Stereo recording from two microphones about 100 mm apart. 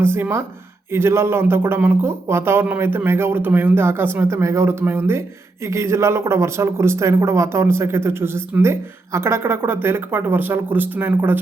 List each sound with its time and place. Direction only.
0.0 s speech: 25° right (ahead or behind)